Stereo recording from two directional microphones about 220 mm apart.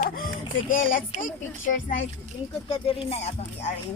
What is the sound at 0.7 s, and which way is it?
Speech, 40° left (ahead or behind).